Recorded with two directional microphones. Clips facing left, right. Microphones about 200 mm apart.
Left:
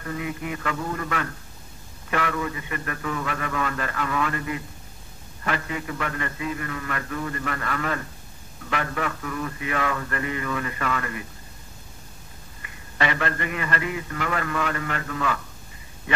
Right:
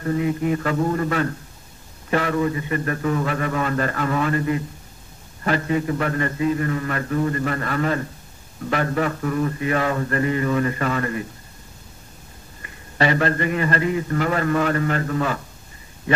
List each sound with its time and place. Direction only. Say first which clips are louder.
0.0 s a man's voice: right 9 dB; 35° right (ahead or behind)
12.6 s a man's voice: right 5 dB; 35° right (ahead or behind)